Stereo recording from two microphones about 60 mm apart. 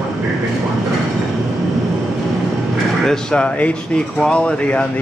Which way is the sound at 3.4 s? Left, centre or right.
Left.